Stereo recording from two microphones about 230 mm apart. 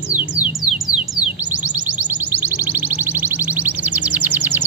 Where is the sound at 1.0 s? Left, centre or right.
Left.